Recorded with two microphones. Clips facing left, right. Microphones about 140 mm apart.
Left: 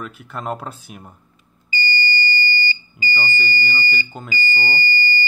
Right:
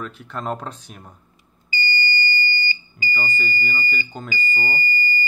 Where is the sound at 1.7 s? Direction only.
25° left (ahead or behind).